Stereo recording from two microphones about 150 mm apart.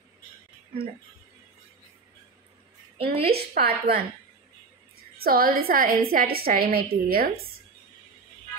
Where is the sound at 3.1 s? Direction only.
40° right (ahead or behind).